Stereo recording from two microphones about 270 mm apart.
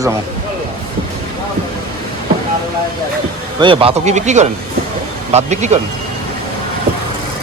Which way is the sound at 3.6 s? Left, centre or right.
Centre.